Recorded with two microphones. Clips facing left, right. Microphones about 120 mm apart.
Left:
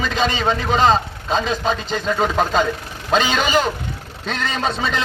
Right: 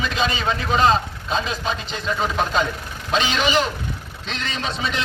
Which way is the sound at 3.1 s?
40° left (ahead or behind).